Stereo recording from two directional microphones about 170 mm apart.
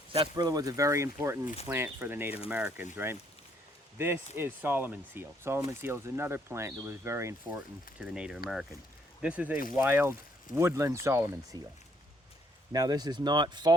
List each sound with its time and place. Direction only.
0.1 s speech: 25° right (ahead or behind)
7.9 s speech: 5° right (ahead or behind)
12.7 s speech: 20° right (ahead or behind)